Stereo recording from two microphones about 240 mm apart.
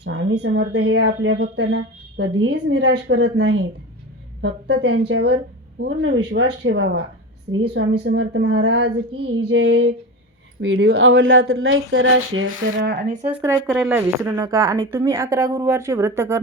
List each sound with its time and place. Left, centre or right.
0.0 s speech: right
10.6 s speech: right
13.2 s speech: right
13.5 s a woman's voice: centre